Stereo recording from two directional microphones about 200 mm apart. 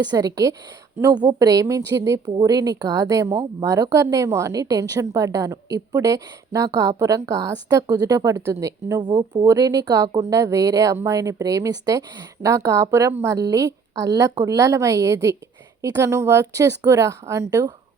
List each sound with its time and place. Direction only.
0.0 s a woman's voice: 20° right (ahead or behind)